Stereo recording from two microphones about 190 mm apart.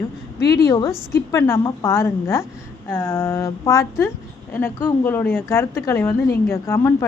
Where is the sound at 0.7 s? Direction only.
15° left (ahead or behind).